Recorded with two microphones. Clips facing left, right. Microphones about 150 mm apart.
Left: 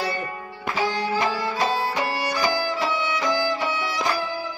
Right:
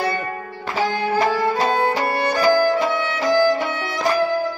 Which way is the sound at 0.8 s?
55° right (ahead or behind).